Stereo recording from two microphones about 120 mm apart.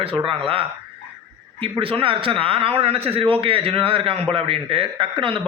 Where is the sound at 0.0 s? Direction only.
50° right (ahead or behind).